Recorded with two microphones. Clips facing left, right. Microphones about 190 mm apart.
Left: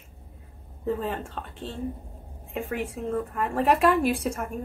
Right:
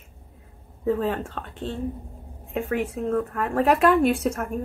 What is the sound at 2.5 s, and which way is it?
Speech, centre (ahead or behind).